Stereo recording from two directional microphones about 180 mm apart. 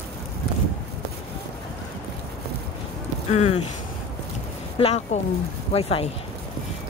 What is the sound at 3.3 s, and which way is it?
Speech, 35° left (ahead or behind).